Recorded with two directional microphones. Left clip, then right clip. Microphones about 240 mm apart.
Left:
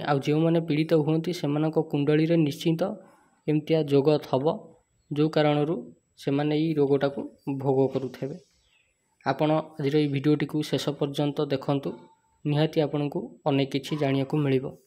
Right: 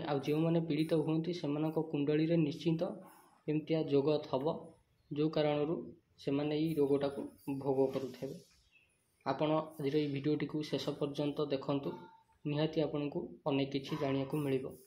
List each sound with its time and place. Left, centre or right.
0.0 s speech: left